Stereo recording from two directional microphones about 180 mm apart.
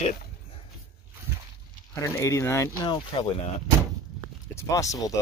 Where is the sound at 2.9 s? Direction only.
30° left (ahead or behind).